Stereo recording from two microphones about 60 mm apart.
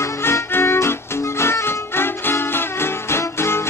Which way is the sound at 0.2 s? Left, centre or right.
Left.